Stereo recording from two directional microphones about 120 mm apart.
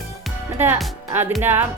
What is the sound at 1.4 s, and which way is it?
Speech, 20° right (ahead or behind).